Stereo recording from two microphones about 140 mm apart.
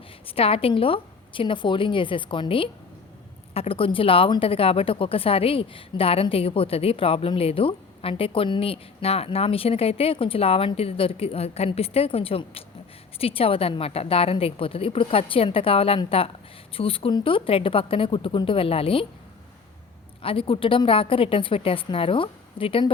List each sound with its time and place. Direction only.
0.3 s a woman's voice: 45° left (ahead or behind)
20.2 s a woman's voice: 40° left (ahead or behind)